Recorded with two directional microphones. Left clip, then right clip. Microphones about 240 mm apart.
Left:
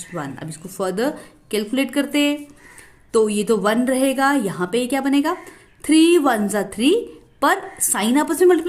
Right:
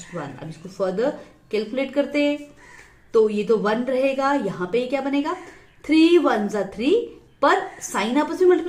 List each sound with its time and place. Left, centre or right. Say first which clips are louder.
0.1 s a woman's voice: left 3 dB; left